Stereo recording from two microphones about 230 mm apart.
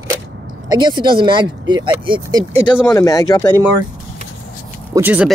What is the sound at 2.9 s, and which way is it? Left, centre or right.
Speech, centre.